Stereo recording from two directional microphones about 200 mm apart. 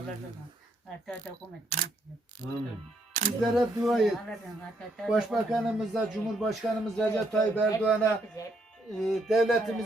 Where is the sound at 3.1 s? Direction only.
40° right (ahead or behind).